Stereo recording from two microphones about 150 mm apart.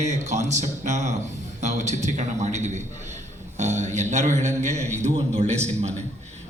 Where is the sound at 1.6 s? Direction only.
50° right (ahead or behind).